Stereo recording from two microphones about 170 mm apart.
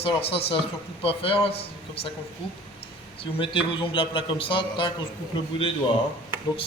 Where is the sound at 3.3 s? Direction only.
30° left (ahead or behind).